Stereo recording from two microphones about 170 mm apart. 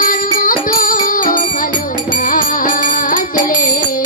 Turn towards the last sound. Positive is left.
turn(degrees=55)  # may be behind; listen again after turning